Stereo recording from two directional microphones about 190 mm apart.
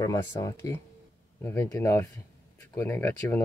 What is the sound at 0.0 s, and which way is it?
Speech, 15° left (ahead or behind).